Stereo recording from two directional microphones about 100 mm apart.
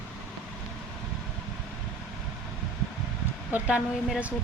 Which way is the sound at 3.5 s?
15° right (ahead or behind).